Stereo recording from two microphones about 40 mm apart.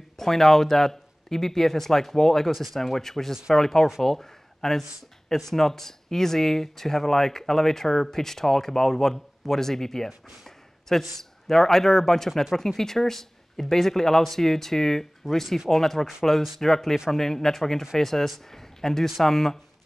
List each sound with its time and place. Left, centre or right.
0.2 s speech: centre